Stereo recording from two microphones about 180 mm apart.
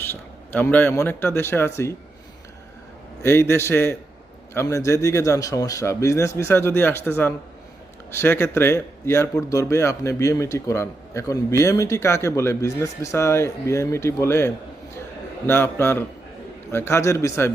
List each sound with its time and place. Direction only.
0.0 s speech: 10° left (ahead or behind)
3.2 s speech: 15° left (ahead or behind)